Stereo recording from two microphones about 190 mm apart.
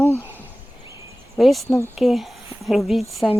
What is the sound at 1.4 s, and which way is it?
Speech, centre (ahead or behind).